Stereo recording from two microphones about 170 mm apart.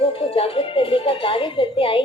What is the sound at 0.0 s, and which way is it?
Speech, 35° left (ahead or behind).